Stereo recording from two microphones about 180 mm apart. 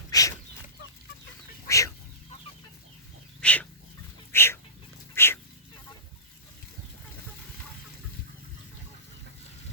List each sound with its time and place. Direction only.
0.1 s chicken: 20° left (ahead or behind)
1.6 s chicken: 15° left (ahead or behind)
3.4 s chicken: 10° left (ahead or behind)
4.3 s dog: 15° left (ahead or behind)